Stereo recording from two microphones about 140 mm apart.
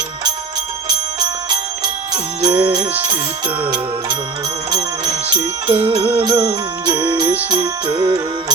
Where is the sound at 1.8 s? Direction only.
30° right (ahead or behind).